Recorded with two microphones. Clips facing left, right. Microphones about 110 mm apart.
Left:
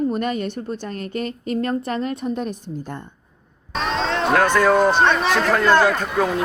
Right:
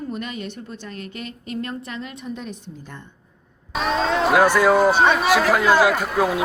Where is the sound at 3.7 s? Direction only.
5° right (ahead or behind).